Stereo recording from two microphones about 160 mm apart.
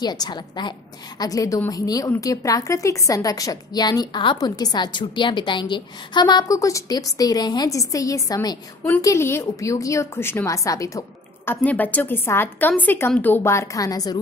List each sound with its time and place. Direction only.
0.0 s a woman's voice: 25° left (ahead or behind)